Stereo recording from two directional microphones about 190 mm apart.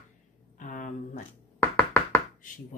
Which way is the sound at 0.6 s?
45° left (ahead or behind).